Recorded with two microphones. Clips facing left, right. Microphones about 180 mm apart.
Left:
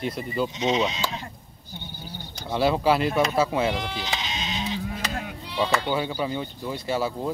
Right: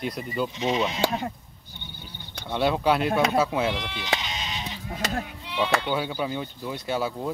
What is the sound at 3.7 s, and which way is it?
Speech, 40° left (ahead or behind).